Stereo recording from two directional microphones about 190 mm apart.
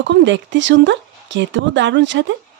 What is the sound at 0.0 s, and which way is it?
Speech, 75° right (ahead or behind).